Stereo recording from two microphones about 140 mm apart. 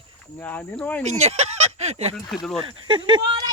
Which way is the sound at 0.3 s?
15° left (ahead or behind).